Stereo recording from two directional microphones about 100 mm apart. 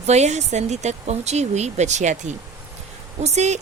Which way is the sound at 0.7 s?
90° right.